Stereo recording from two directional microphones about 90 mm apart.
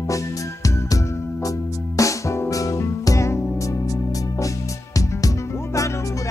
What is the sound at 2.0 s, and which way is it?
Music, 35° left (ahead or behind).